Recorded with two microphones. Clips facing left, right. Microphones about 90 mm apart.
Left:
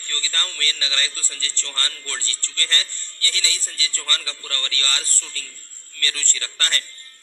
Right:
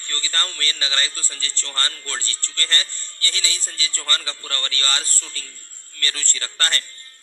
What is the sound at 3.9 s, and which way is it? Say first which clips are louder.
A man's voice: right 4 dB; 20° right (ahead or behind).